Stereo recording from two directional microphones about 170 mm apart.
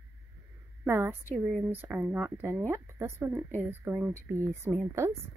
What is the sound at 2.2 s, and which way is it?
Speech, 15° right (ahead or behind).